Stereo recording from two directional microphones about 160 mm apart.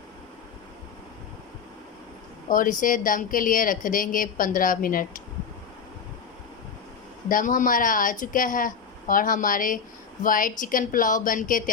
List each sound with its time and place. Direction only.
2.5 s speech: 55° left (ahead or behind)
7.3 s speech: 55° left (ahead or behind)